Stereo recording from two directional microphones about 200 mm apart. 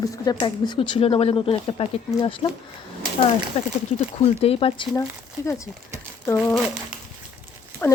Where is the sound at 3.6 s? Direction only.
30° left (ahead or behind).